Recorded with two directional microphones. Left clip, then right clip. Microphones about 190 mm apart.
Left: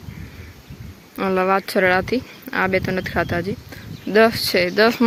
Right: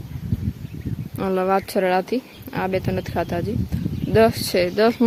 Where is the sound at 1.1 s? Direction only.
5° right (ahead or behind).